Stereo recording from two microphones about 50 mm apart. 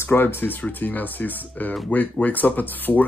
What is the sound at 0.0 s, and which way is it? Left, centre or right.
Speech, left.